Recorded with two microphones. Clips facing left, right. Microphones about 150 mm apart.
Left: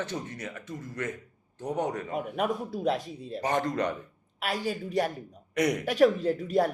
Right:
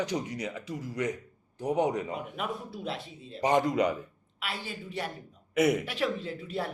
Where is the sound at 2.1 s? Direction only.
45° left (ahead or behind).